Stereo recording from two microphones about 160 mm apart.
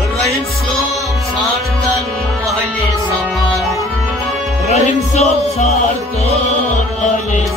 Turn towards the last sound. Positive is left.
turn(degrees=40)  # may be behind; listen again after turning